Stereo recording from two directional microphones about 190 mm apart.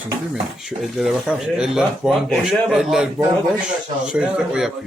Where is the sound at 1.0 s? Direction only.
5° right (ahead or behind).